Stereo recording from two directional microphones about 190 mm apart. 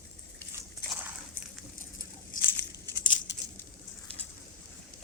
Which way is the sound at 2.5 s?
15° left (ahead or behind).